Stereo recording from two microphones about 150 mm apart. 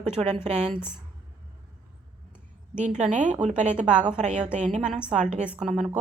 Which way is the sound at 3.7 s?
5° right (ahead or behind).